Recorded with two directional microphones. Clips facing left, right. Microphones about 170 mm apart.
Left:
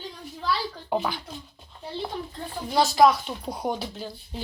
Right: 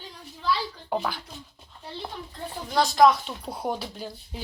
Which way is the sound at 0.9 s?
5° left (ahead or behind).